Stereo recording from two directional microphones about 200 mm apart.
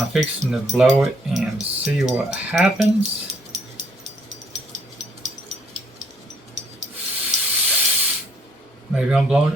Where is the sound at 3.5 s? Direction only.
35° right (ahead or behind).